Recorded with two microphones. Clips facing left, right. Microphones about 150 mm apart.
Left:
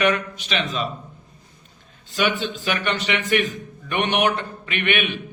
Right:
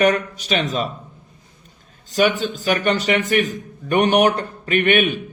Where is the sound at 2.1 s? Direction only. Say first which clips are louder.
Right 5 dB; 40° right (ahead or behind).